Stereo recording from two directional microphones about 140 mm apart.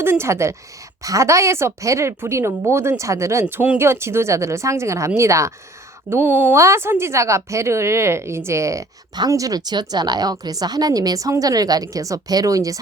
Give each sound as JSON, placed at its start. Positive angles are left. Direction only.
{"t": 0.0, "sound": "speech", "side_deg": -15}
{"t": 3.4, "sound": "speech", "side_deg": -10}